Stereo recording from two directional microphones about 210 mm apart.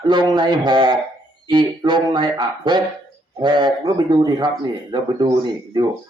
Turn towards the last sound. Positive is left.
turn(degrees=-20)  # may be behind; listen again after turning